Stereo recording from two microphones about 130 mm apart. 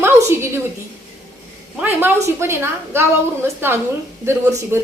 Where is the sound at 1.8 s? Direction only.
15° right (ahead or behind).